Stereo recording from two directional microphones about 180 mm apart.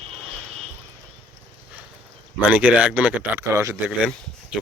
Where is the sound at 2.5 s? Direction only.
5° right (ahead or behind).